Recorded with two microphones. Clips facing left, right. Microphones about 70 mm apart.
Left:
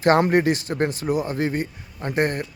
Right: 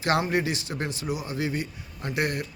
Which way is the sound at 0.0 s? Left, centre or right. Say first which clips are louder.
Left 7 dB; left.